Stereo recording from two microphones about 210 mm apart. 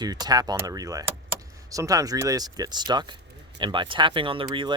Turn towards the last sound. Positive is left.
turn(degrees=-25)  # may be behind; listen again after turning